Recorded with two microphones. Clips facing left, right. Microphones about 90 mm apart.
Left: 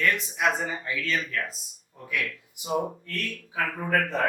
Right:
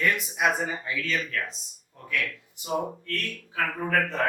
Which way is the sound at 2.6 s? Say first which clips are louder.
Left 1 dB; 15° left (ahead or behind).